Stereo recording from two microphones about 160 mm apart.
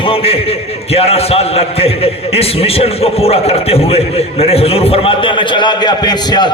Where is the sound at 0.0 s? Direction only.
35° left (ahead or behind).